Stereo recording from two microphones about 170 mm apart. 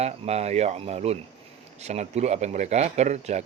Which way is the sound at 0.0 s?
40° right (ahead or behind).